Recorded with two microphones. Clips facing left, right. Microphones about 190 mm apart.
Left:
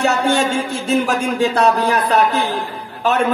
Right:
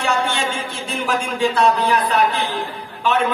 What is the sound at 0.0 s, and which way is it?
A man's voice, 40° left (ahead or behind).